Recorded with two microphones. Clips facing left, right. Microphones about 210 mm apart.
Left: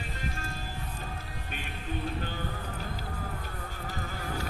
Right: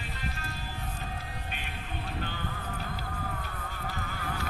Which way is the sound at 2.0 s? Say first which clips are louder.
Left 1 dB; 45° left (ahead or behind).